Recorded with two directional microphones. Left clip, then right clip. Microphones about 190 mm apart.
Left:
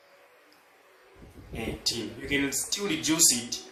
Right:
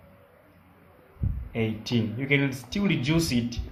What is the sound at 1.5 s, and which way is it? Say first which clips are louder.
Speech: right 2 dB; 40° right (ahead or behind).